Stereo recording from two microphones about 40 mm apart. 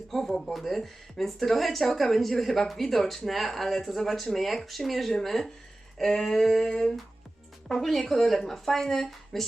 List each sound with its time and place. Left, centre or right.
0.3 s a woman's voice: centre
6.6 s speech: centre